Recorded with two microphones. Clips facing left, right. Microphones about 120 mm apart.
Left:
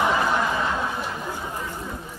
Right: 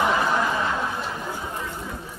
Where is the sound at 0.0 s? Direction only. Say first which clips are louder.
Even; centre (ahead or behind).